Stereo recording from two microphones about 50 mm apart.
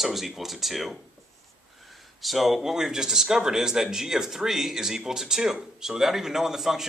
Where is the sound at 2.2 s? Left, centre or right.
Centre.